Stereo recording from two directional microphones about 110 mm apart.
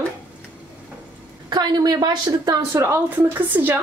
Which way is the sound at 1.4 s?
40° right (ahead or behind).